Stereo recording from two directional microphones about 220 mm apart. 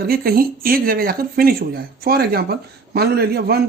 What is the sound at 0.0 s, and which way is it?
Speech, 45° right (ahead or behind).